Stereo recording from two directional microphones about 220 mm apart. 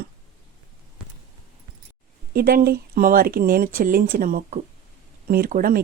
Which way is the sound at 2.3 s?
45° right (ahead or behind).